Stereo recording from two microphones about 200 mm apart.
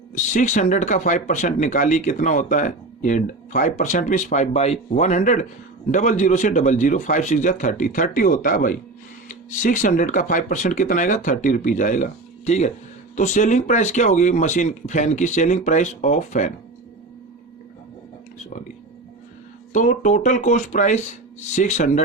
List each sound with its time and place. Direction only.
0.1 s speech: 40° left (ahead or behind)
19.7 s speech: 40° left (ahead or behind)